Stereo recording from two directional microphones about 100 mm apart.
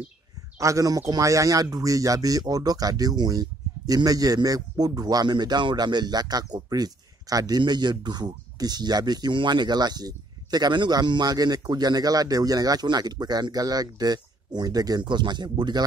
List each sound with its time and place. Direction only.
0.6 s speech: 35° right (ahead or behind)